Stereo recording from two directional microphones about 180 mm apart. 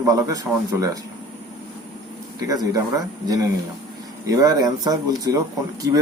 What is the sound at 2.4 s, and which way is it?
Speech, 20° right (ahead or behind).